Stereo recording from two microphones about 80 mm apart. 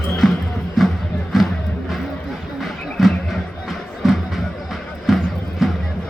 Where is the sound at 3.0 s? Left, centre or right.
Centre.